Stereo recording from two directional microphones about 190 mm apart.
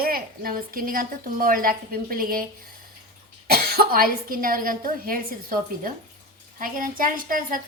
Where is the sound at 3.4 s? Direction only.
55° right (ahead or behind).